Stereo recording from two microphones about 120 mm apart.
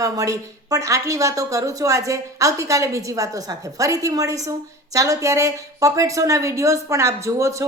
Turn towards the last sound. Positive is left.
turn(degrees=-25)  # may be behind; listen again after turning